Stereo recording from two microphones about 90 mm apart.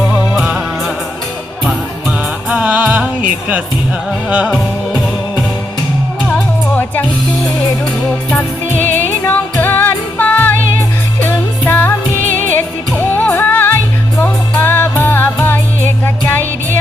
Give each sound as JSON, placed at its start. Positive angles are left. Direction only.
{"t": 0.1, "sound": "music", "side_deg": -5}
{"t": 2.5, "sound": "music", "side_deg": -15}
{"t": 6.7, "sound": "music", "side_deg": 20}